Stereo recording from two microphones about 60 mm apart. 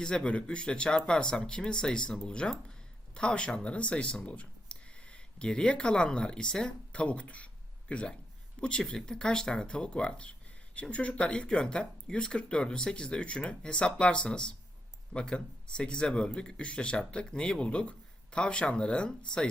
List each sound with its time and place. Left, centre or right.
0.0 s speech: centre